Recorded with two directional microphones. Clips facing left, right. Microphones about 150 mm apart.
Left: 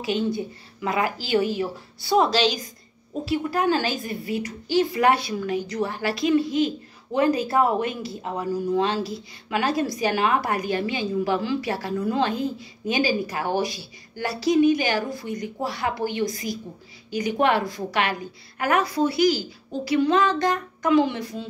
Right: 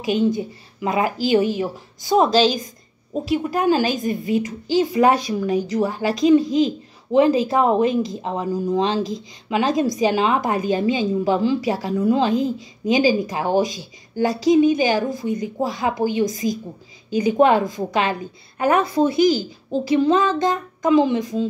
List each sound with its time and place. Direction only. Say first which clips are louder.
0.0 s speech: right 5 dB; 15° right (ahead or behind)
12.4 s a woman's voice: right 6 dB; 90° right
12.9 s speech: right 6 dB; 15° right (ahead or behind)
17.5 s speech: right 5 dB; 15° right (ahead or behind)